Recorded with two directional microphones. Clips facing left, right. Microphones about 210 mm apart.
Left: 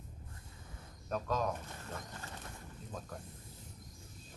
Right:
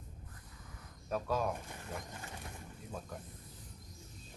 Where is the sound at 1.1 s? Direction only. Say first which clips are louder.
Right 1 dB; 10° right (ahead or behind).